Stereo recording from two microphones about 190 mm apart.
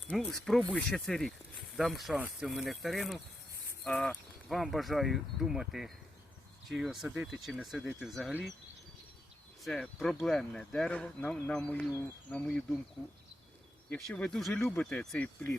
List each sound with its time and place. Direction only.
0.1 s speech: 5° left (ahead or behind)
9.6 s speech: 5° left (ahead or behind)
13.9 s speech: 5° left (ahead or behind)